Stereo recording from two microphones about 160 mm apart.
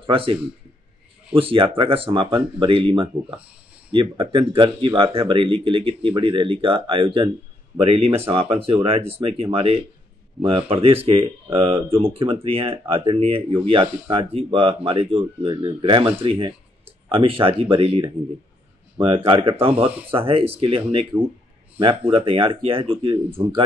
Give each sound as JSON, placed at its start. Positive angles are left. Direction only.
{"t": 0.0, "sound": "speech", "side_deg": -35}